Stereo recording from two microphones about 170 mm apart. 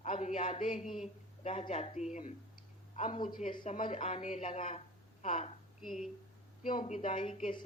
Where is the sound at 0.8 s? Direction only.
Centre (ahead or behind).